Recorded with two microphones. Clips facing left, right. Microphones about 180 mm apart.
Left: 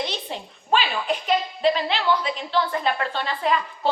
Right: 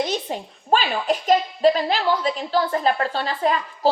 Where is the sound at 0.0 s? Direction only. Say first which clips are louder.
Right 5 dB; 45° right (ahead or behind).